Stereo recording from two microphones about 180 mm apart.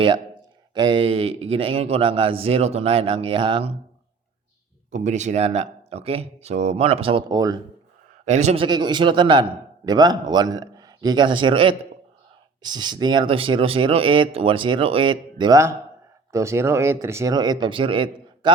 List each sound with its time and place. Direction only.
0.7 s speech: 25° right (ahead or behind)
4.9 s speech: 40° right (ahead or behind); by 7.6 s 20° right (ahead or behind)
8.2 s a man's voice: 40° right (ahead or behind)
8.6 s a man's voice: 25° right (ahead or behind)